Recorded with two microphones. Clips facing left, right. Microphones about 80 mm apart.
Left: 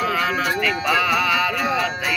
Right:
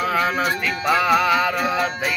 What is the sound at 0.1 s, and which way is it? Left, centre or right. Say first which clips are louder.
Music: right 1 dB; right.